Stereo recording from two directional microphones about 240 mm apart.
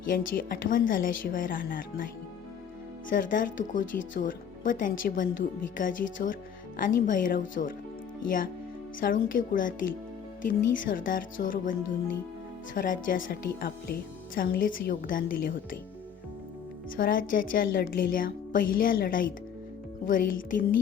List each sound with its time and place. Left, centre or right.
0.1 s speech: left
3.1 s speech: left
9.0 s speech: left
10.8 s speech: left
17.0 s speech: left